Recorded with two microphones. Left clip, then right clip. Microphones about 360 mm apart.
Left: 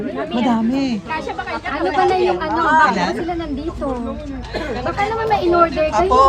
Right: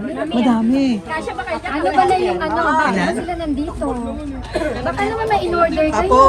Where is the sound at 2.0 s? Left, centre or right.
Centre.